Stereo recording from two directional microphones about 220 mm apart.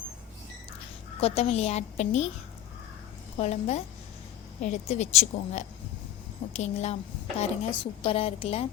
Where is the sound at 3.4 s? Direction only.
30° left (ahead or behind).